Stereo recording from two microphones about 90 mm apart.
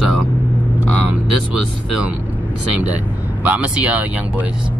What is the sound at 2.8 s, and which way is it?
Speech, 15° right (ahead or behind).